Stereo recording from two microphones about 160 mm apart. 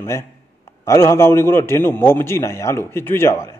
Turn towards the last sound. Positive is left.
turn(degrees=15)  # may be behind; listen again after turning